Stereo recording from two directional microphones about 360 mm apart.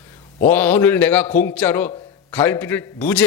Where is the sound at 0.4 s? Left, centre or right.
Centre.